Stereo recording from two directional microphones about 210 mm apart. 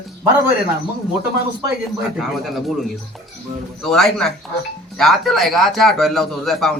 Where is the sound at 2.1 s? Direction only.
Centre (ahead or behind).